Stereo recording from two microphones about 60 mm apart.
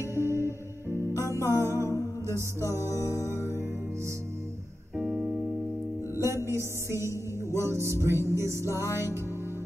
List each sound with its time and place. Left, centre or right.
0.0 s music: right
3.2 s music: left
4.9 s piano: centre
6.1 s music: right
8.8 s music: left